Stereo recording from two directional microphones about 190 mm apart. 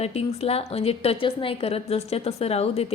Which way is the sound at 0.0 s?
35° left (ahead or behind).